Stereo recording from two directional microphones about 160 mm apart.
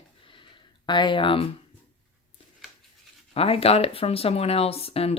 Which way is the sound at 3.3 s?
35° left (ahead or behind).